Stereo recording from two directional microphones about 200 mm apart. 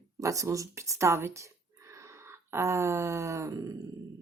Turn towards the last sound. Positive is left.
turn(degrees=-15)  # may be behind; listen again after turning